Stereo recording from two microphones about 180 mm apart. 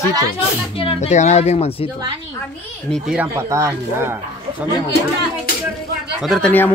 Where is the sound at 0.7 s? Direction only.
35° left (ahead or behind).